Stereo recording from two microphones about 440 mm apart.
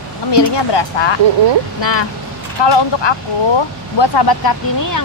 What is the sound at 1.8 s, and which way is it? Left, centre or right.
Speech, left.